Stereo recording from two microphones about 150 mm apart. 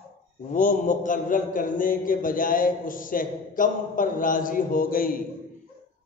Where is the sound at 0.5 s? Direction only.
60° left (ahead or behind).